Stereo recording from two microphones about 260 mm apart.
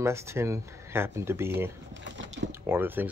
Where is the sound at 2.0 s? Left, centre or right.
Right.